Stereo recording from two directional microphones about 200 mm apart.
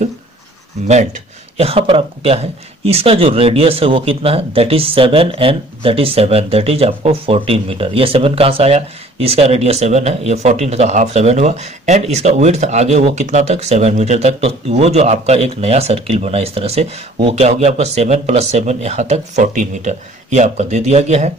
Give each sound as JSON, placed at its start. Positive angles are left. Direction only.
{"t": 1.6, "sound": "speech", "side_deg": -30}